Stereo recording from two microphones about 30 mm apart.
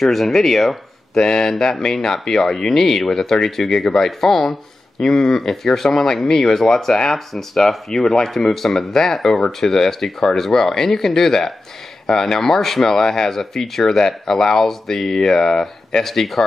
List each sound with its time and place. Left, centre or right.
0.0 s speech: centre; by 7.8 s left
8.4 s speech: centre
15.1 s speech: left
16.1 s speech: centre